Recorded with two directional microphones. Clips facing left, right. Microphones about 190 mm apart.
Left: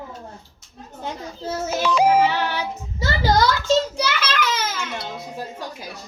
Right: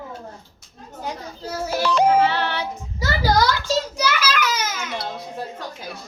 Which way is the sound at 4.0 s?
25° left (ahead or behind).